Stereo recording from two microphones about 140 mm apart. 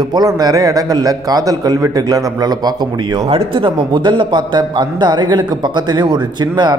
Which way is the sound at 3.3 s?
40° right (ahead or behind).